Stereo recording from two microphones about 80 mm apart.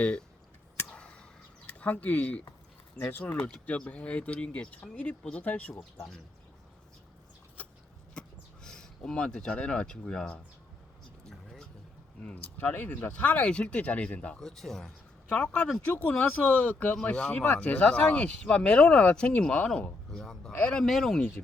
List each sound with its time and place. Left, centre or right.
0.0 s speech: centre
0.9 s a sound: centre
3.0 s speech: left
8.2 s a sound: centre
8.6 s speech: centre
12.5 s speech: left
14.4 s speech: centre
20.1 s a man's voice: centre